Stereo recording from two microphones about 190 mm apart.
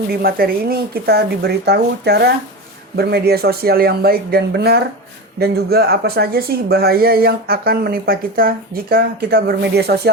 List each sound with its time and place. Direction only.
0.1 s a woman's voice: 55° right (ahead or behind)